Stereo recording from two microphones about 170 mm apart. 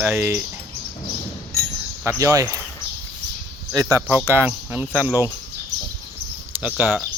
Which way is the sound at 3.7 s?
20° right (ahead or behind).